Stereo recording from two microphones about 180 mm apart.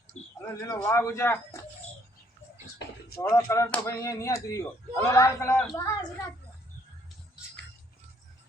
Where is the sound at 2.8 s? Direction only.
70° left (ahead or behind).